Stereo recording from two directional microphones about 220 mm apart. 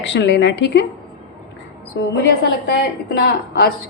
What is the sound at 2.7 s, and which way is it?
A woman's voice, 45° left (ahead or behind).